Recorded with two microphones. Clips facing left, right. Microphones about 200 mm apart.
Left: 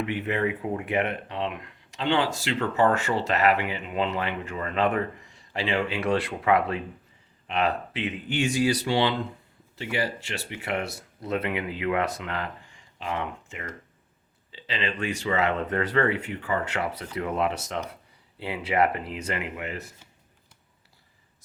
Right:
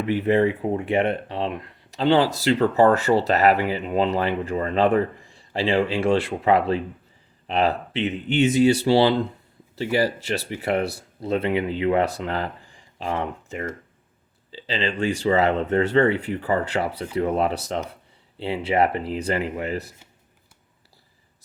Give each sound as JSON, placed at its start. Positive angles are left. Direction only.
{"t": 0.0, "sound": "speech", "side_deg": -35}